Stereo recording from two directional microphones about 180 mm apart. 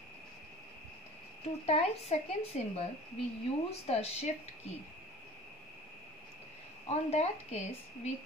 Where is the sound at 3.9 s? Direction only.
35° left (ahead or behind).